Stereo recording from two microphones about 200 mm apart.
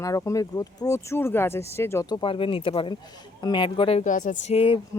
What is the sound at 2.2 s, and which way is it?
Speech, 25° left (ahead or behind).